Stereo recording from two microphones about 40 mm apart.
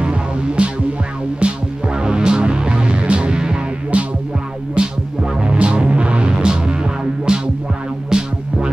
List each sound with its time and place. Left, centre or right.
0.0 s music: right